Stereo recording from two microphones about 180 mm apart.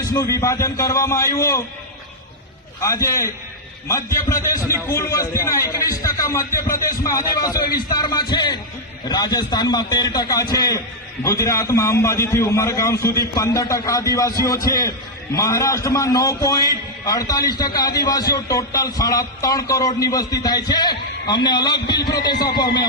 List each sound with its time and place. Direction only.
0.0 s a man's voice: 20° left (ahead or behind)
2.8 s a man's voice: 20° left (ahead or behind)